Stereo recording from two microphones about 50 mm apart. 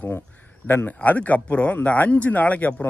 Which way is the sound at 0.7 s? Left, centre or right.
Left.